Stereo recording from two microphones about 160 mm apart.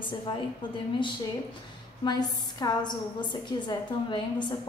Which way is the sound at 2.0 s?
25° left (ahead or behind).